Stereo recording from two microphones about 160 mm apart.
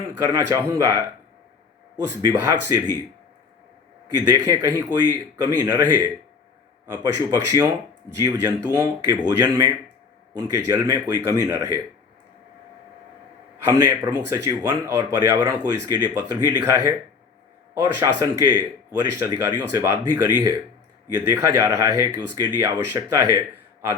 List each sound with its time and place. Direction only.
0.2 s speech: 20° right (ahead or behind)
2.0 s speech: 15° right (ahead or behind)
4.2 s speech: 20° right (ahead or behind)
13.6 s a man's voice: 15° right (ahead or behind)
17.9 s speech: 20° right (ahead or behind)